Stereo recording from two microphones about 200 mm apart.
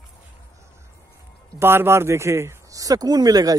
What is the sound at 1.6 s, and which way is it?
Speech, 10° right (ahead or behind).